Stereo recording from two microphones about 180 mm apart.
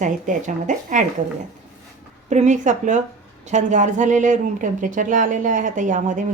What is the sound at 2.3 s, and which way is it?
Speech, 40° right (ahead or behind).